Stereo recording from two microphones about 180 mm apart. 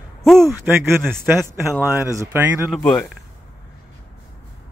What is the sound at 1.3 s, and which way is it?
A man's voice, 10° right (ahead or behind).